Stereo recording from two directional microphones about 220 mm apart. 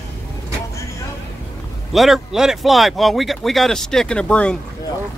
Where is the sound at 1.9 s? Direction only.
Centre (ahead or behind).